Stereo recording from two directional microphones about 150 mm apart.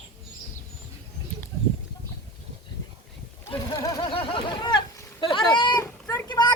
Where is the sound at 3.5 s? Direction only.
20° left (ahead or behind).